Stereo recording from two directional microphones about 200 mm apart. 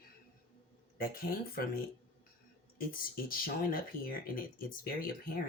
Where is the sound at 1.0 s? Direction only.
45° left (ahead or behind).